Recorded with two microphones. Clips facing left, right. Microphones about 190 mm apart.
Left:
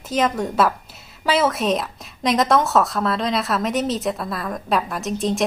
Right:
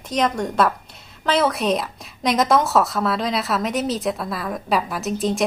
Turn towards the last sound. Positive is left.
turn(degrees=0)  # may be behind; listen again after turning